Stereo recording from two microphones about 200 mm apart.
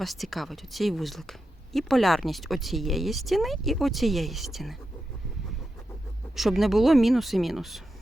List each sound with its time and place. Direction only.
0.0 s speech: centre (ahead or behind)
6.3 s speech: centre (ahead or behind)